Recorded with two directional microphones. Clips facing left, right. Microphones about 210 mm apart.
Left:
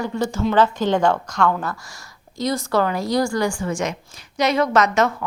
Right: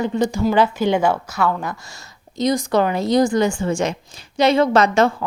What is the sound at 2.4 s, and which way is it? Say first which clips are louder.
A woman's voice: right 3 dB; 15° right (ahead or behind).